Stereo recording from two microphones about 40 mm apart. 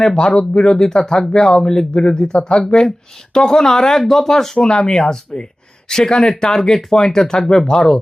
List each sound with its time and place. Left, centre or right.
0.3 s speech: left